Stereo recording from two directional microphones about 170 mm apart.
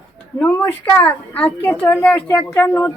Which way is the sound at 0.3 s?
10° left (ahead or behind).